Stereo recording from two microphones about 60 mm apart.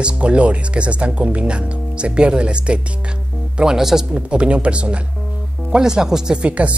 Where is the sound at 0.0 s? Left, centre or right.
Centre.